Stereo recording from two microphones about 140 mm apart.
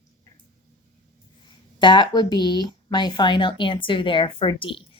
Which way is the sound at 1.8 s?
30° left (ahead or behind).